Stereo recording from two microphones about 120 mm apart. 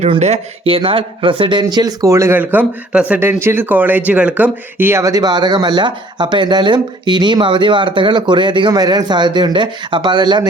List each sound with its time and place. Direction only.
0.2 s speech: 60° right (ahead or behind); by 2.4 s 25° right (ahead or behind)
2.4 s speech: 15° right (ahead or behind); by 10.5 s 40° right (ahead or behind)